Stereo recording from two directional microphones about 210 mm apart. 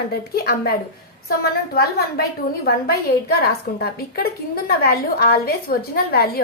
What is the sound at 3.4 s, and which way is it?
A woman's voice, 45° left (ahead or behind).